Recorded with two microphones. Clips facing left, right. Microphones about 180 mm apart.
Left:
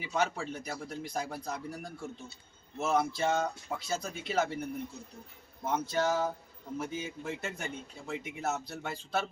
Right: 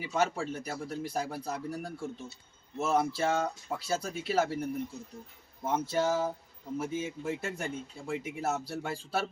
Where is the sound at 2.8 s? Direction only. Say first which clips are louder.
Right 1 dB; 10° right (ahead or behind).